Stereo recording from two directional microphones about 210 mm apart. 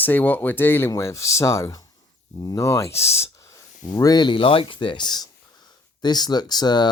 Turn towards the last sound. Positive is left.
turn(degrees=20)  # may be behind; listen again after turning